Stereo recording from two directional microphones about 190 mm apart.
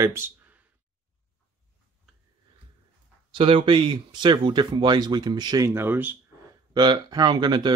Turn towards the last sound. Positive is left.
turn(degrees=-25)  # may be behind; listen again after turning